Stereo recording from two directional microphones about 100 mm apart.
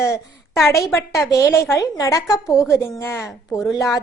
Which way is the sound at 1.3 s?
30° left (ahead or behind).